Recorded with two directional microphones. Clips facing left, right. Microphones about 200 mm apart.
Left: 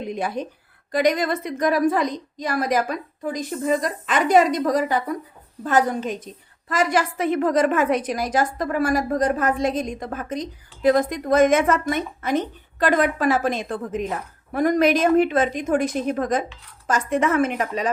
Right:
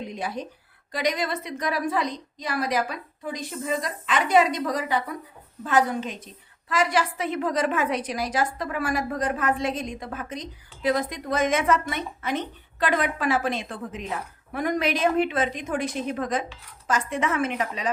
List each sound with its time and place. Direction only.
0.1 s a woman's voice: 50° left (ahead or behind)